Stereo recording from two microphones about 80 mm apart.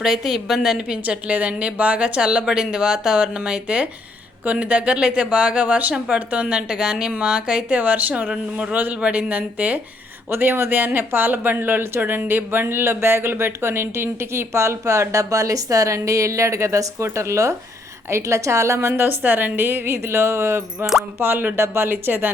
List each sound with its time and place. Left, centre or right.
0.0 s a woman's voice: centre; by 20.7 s right
20.7 s speech: centre
21.2 s speech: right